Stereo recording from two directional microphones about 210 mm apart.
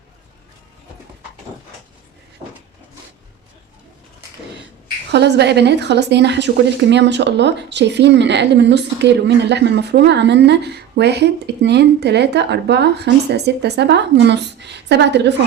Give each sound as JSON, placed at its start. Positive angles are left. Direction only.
{"t": 5.1, "sound": "a woman's voice", "side_deg": -55}